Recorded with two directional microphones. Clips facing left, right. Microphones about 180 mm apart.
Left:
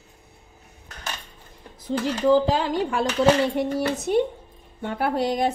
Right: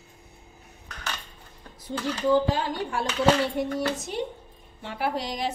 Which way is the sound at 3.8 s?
60° left (ahead or behind).